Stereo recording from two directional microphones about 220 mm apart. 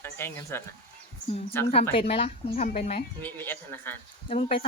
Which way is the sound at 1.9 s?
25° left (ahead or behind).